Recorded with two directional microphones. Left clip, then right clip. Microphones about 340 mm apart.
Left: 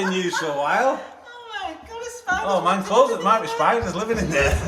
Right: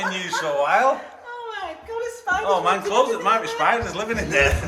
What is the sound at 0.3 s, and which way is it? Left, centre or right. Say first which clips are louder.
Speech: right 4 dB; centre.